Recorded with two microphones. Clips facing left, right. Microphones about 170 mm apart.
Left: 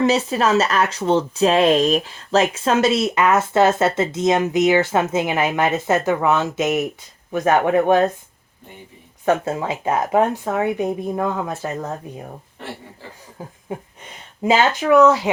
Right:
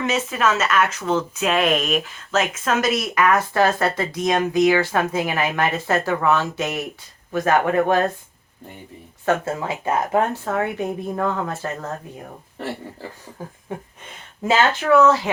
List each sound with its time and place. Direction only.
0.0 s speech: 35° left (ahead or behind); by 8.0 s 20° left (ahead or behind)
9.2 s speech: 20° left (ahead or behind)
13.4 s speech: 15° left (ahead or behind)